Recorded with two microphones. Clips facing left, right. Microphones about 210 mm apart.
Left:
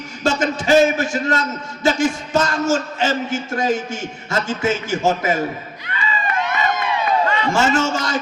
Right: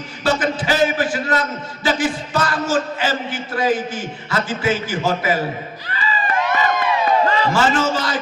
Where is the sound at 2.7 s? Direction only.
45° left (ahead or behind).